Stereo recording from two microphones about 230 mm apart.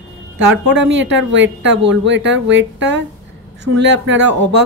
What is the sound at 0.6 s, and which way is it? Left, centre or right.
Speech, right.